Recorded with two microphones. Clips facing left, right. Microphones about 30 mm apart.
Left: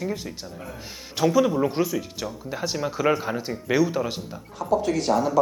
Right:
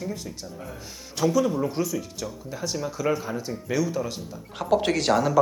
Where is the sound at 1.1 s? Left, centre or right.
Left.